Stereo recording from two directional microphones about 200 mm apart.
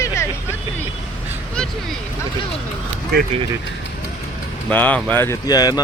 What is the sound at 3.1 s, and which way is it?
Speech, 50° right (ahead or behind).